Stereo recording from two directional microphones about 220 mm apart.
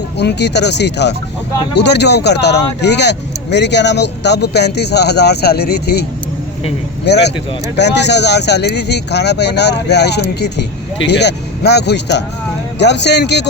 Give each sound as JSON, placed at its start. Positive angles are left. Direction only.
{"t": 0.2, "sound": "speech", "side_deg": 50}